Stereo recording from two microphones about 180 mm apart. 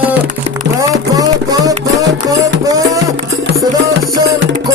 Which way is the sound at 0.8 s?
20° right (ahead or behind).